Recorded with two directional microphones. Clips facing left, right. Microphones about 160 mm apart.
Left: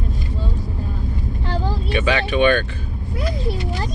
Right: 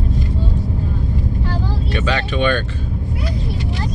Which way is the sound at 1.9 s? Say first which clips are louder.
Left 2 dB; 10° left (ahead or behind).